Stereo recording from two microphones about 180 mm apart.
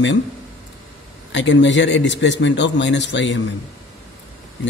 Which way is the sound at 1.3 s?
90° left.